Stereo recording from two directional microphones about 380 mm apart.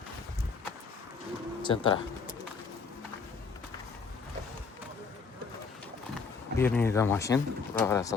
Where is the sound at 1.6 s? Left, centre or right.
Centre.